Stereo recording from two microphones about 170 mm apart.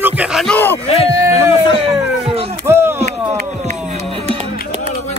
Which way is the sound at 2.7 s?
15° right (ahead or behind).